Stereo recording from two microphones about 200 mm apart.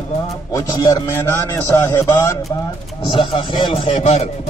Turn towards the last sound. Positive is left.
turn(degrees=35)  # may be behind; listen again after turning